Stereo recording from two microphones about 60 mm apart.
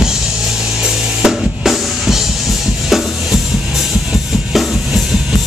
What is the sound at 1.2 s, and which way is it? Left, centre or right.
Drum kit, centre.